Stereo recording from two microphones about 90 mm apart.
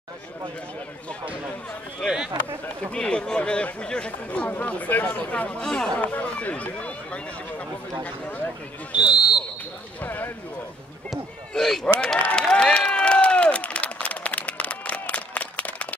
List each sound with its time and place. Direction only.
2.0 s speech: 10° left (ahead or behind)
9.0 s speech: 55° left (ahead or behind)
10.0 s speech: 25° left (ahead or behind)
11.1 s speech: 5° left (ahead or behind)
12.3 s a sound: 10° left (ahead or behind)